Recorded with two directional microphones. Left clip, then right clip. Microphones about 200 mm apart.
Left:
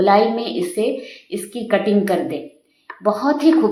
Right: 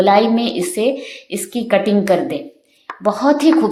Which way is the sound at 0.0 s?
40° right (ahead or behind).